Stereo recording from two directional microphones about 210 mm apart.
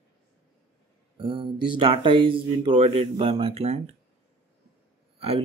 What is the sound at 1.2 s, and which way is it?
Speech, 25° right (ahead or behind).